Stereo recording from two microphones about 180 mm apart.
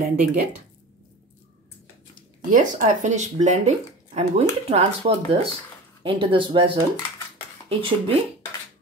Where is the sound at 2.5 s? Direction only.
45° right (ahead or behind); by 6.7 s 25° right (ahead or behind).